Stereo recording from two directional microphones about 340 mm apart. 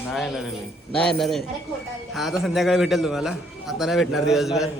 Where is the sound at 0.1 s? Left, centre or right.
Centre.